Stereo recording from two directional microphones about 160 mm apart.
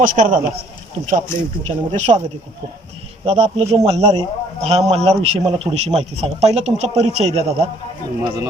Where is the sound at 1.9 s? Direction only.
45° right (ahead or behind).